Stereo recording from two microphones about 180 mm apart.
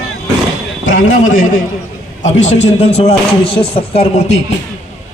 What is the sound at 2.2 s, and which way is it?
Speech, 40° left (ahead or behind).